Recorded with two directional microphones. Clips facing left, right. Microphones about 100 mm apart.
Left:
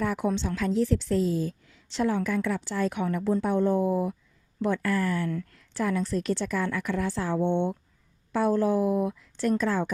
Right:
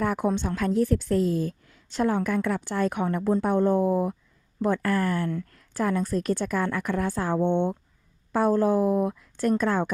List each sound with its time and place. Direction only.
0.0 s a woman's voice: 50° right (ahead or behind)